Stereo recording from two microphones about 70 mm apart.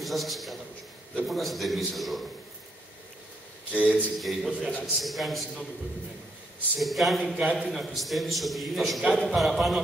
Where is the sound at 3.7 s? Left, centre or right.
Centre.